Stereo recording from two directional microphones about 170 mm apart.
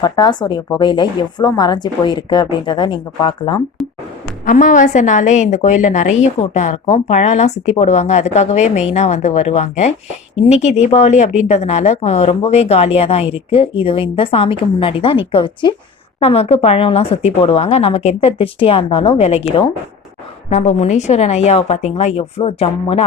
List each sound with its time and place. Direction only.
0.0 s a woman's voice: 25° left (ahead or behind)
3.8 s music: centre (ahead or behind)
4.4 s a woman's voice: 50° left (ahead or behind)
20.5 s speech: 45° left (ahead or behind)